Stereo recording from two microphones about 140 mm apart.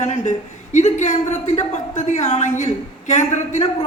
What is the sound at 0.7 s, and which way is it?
A man's voice, 60° left (ahead or behind).